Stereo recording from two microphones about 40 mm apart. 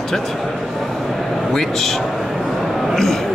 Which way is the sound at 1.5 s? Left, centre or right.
Centre.